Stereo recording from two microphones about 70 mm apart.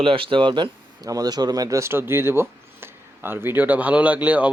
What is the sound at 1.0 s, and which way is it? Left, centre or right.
Speech, right.